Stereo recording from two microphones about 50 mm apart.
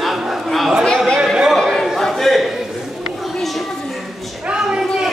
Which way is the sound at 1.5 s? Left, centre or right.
Centre.